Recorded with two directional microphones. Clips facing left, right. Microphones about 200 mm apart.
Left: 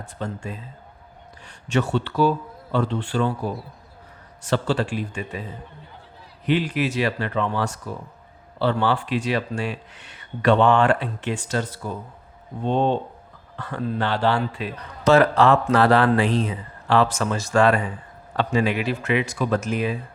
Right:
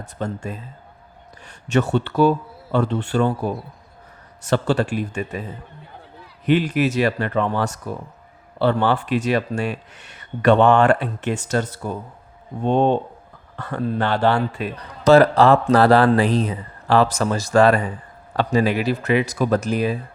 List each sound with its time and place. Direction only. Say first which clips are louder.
0.0 s speech: right 3 dB; 40° right (ahead or behind)
6.4 s a man's voice: right 4 dB; 45° right (ahead or behind)